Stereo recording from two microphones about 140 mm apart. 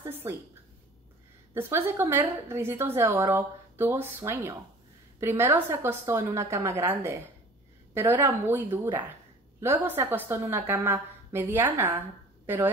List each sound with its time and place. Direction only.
0.0 s a woman's voice: 20° right (ahead or behind)
1.5 s a woman's voice: 15° right (ahead or behind)